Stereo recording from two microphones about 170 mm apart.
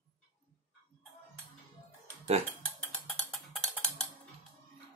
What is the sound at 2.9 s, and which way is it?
Percussion, centre (ahead or behind).